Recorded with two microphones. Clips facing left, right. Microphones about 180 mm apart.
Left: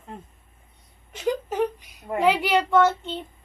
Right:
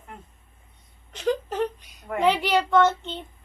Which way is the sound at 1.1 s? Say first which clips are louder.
Even; 10° left (ahead or behind).